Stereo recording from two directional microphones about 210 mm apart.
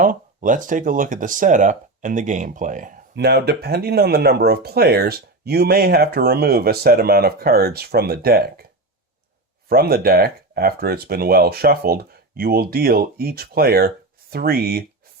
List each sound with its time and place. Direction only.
0.0 s speech: 40° right (ahead or behind)
9.6 s speech: 45° right (ahead or behind)